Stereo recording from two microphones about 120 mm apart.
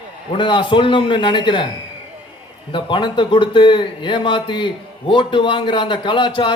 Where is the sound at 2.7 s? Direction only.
45° left (ahead or behind).